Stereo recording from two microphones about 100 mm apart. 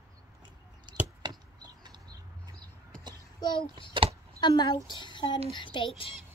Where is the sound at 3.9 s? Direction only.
70° right (ahead or behind).